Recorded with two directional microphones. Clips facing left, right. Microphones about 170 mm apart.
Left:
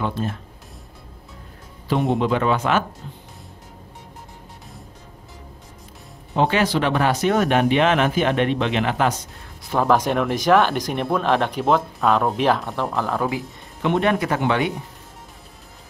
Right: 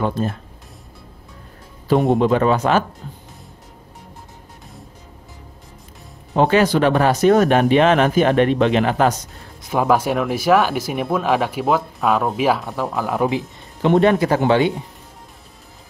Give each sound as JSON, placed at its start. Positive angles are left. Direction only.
{"t": 0.0, "sound": "speech", "side_deg": -45}
{"t": 2.1, "sound": "speech", "side_deg": -40}
{"t": 6.3, "sound": "speech", "side_deg": -45}
{"t": 9.8, "sound": "speech", "side_deg": -10}
{"t": 13.1, "sound": "speech", "side_deg": -20}
{"t": 13.8, "sound": "speech", "side_deg": -35}